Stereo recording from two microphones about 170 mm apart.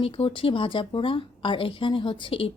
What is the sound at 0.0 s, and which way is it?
A woman's voice, 35° left (ahead or behind).